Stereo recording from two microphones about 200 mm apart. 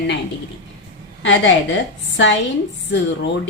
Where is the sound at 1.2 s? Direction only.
65° left (ahead or behind).